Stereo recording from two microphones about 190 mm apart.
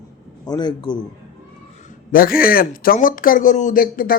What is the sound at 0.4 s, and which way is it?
Speech, 20° left (ahead or behind).